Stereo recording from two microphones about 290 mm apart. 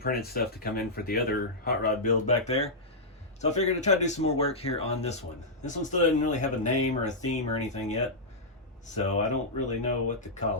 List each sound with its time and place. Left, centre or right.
0.0 s speech: left
9.0 s speech: left